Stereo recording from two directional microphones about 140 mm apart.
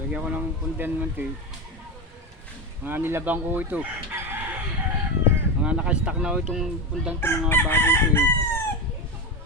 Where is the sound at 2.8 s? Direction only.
15° right (ahead or behind).